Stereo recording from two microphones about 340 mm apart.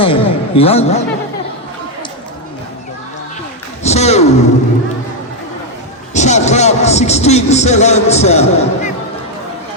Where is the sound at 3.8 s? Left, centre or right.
Centre.